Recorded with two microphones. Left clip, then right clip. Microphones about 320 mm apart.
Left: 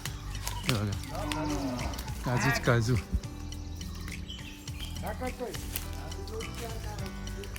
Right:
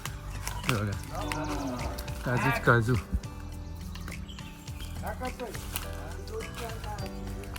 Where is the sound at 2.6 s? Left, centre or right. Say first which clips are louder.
Right 4 dB; centre.